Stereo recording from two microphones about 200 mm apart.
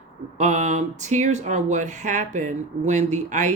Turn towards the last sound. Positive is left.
turn(degrees=-40)  # may be behind; listen again after turning